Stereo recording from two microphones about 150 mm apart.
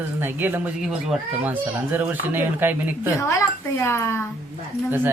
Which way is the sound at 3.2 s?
20° left (ahead or behind).